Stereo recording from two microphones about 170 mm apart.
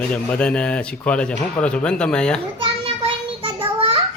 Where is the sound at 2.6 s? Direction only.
30° right (ahead or behind).